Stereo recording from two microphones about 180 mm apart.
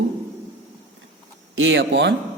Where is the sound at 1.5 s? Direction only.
90° right.